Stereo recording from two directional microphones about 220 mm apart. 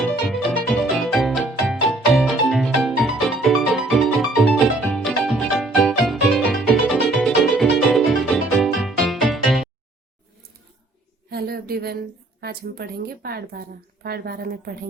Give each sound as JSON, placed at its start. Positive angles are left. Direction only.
{"t": 0.1, "sound": "music", "side_deg": 0}
{"t": 11.3, "sound": "a woman's voice", "side_deg": -45}